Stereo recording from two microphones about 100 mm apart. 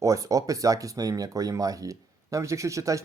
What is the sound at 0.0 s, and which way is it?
Speech, 35° right (ahead or behind).